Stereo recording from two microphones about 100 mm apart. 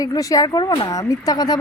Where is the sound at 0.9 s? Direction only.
35° left (ahead or behind).